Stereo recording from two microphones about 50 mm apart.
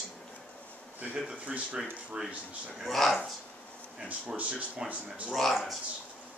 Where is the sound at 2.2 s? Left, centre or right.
Centre.